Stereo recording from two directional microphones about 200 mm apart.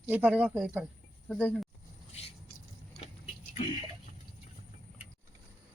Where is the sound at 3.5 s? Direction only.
25° left (ahead or behind).